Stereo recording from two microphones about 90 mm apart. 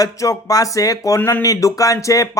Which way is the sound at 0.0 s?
40° left (ahead or behind).